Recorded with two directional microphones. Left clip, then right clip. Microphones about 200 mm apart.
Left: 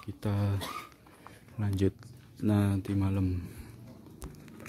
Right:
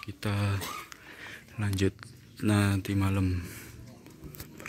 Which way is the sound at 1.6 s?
10° left (ahead or behind).